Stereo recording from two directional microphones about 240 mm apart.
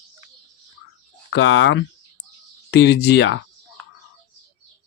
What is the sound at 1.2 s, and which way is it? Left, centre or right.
Speech, left.